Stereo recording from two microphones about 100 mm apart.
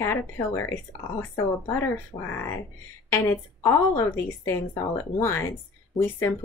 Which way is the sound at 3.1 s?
25° left (ahead or behind).